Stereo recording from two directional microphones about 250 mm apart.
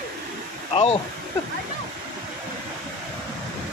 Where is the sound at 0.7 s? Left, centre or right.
Left.